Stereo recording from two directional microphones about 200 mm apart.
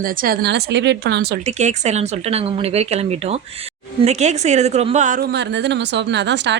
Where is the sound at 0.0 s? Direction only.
45° right (ahead or behind).